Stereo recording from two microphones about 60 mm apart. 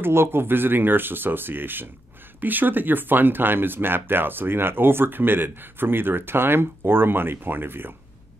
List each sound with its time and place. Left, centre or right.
0.0 s speech: right